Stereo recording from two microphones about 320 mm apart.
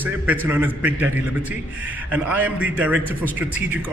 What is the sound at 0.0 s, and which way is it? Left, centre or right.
A man's voice, centre.